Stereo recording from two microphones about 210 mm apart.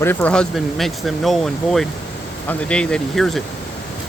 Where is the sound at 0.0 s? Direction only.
10° left (ahead or behind).